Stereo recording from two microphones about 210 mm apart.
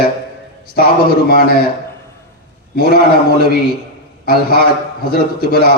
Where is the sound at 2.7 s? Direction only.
45° left (ahead or behind).